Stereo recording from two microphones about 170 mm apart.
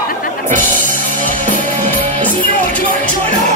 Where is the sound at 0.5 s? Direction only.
50° right (ahead or behind).